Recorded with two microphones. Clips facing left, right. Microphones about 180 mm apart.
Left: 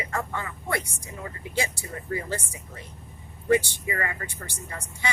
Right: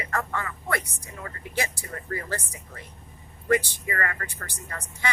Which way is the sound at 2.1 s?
20° left (ahead or behind).